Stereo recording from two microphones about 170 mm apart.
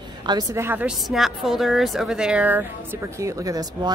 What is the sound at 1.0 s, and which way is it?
A woman's voice, centre (ahead or behind).